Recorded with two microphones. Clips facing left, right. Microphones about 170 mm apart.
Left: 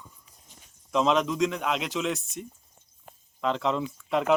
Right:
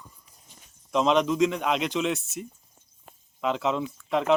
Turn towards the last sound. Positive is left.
turn(degrees=0)  # may be behind; listen again after turning